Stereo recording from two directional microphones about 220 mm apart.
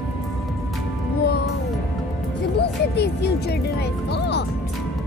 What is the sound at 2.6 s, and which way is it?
Speech, 50° left (ahead or behind).